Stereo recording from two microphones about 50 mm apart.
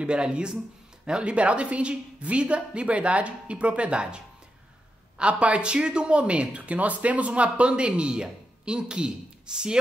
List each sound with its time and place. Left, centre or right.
0.0 s speech: centre